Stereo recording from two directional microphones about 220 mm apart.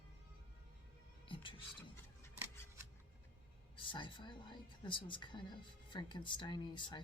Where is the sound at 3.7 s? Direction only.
20° left (ahead or behind).